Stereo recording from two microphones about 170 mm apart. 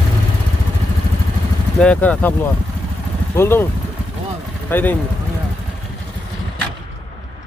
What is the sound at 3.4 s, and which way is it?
Speech, 15° left (ahead or behind).